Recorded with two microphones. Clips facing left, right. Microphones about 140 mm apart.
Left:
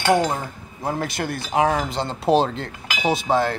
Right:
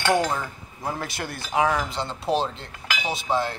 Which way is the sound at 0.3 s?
35° left (ahead or behind).